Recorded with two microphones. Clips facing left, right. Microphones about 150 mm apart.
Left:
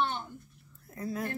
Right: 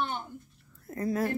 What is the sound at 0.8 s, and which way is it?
Speech, 45° right (ahead or behind).